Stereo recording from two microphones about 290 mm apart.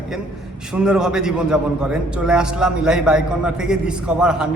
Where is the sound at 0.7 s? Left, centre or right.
Centre.